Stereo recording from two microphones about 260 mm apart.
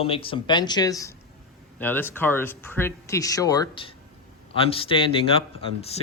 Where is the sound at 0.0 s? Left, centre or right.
Left.